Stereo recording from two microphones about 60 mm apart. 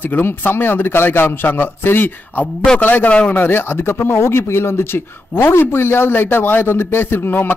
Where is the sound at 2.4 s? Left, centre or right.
Centre.